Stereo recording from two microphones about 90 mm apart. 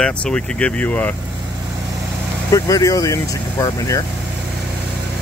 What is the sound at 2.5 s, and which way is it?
Speech, 40° left (ahead or behind).